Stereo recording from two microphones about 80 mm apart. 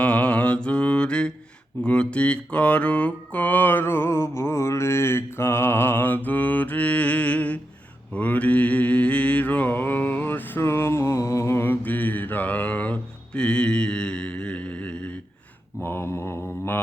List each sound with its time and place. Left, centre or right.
0.0 s mantra: centre
15.8 s mantra: left